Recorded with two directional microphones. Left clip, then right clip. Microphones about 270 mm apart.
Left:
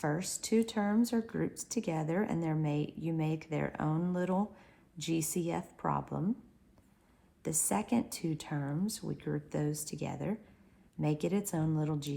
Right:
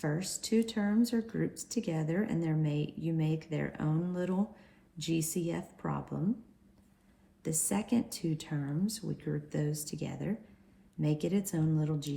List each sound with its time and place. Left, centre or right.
0.0 s speech: left
7.4 s speech: left